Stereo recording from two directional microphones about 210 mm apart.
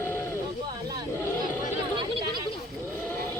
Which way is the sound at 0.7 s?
20° right (ahead or behind).